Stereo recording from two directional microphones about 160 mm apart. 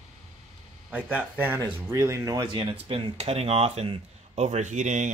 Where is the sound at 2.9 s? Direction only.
40° right (ahead or behind).